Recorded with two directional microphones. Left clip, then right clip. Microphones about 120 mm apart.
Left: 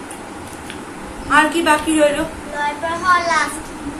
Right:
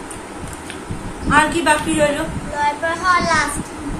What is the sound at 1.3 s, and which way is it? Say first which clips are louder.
Speech: left 1 dB; 10° left (ahead or behind).